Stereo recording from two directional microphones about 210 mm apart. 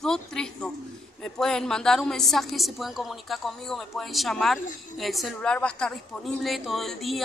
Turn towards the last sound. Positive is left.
turn(degrees=0)  # may be behind; listen again after turning